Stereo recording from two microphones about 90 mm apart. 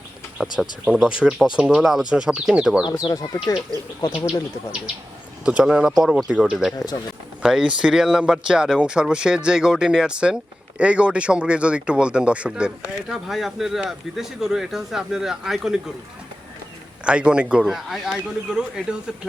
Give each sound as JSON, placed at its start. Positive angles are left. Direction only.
{"t": 0.4, "sound": "speech", "side_deg": 0}
{"t": 2.8, "sound": "speech", "side_deg": 55}
{"t": 5.5, "sound": "speech", "side_deg": -10}
{"t": 17.0, "sound": "speech", "side_deg": -10}